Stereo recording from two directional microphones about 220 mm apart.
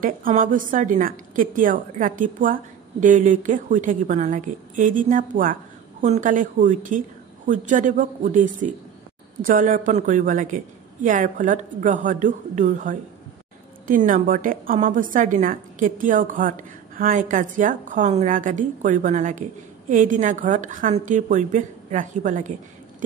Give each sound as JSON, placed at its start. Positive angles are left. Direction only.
{"t": 0.0, "sound": "a woman's voice", "side_deg": -40}